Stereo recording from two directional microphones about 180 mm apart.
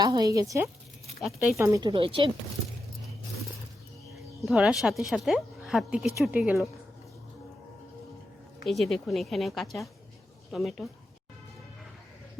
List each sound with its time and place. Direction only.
0.0 s speech: 20° right (ahead or behind)
1.0 s speech: centre (ahead or behind)
1.5 s speech: 15° right (ahead or behind)
4.4 s speech: centre (ahead or behind)
8.6 s speech: centre (ahead or behind)